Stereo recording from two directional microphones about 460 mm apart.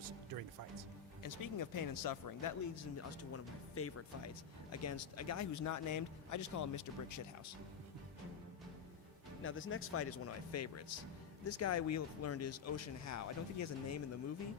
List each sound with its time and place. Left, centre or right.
1.2 s speech: left
3.3 s speech: left
9.4 s speech: left